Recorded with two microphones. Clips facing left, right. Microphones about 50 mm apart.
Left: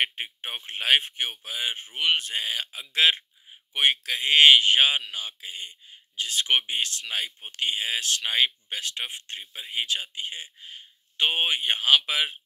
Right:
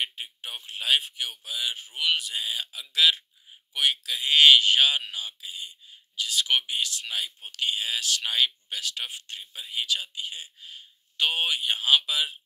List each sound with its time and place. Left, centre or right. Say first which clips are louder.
0.0 s speech: left 5 dB; left